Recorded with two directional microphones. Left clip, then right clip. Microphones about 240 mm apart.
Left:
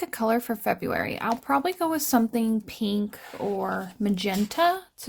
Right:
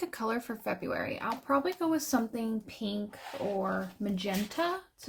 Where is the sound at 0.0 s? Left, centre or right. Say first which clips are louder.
Left 8 dB; left.